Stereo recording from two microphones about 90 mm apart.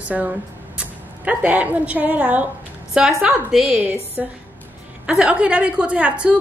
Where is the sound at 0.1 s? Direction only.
20° right (ahead or behind).